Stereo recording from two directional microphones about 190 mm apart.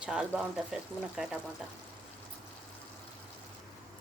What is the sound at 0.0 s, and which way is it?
Speech, 5° right (ahead or behind).